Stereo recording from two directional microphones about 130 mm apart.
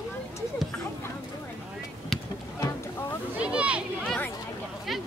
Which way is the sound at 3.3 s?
10° right (ahead or behind).